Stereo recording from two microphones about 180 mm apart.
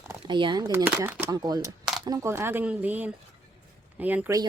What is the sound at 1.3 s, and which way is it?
Speech, 20° right (ahead or behind).